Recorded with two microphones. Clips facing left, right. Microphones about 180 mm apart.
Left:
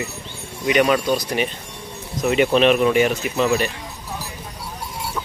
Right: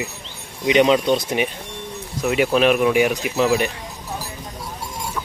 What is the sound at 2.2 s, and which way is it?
Speech, 5° right (ahead or behind).